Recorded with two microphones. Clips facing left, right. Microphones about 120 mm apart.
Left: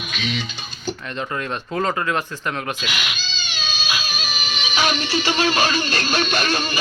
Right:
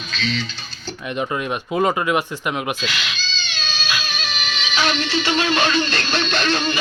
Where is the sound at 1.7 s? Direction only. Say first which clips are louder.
Right 3 dB; 15° right (ahead or behind).